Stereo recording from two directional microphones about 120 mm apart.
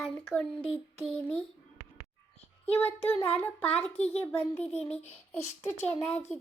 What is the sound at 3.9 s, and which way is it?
Speech, 60° left (ahead or behind).